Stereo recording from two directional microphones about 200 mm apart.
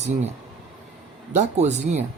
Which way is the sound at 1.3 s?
35° right (ahead or behind).